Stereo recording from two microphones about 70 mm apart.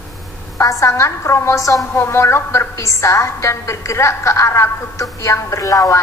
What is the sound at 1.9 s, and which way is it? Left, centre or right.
A woman's voice, left.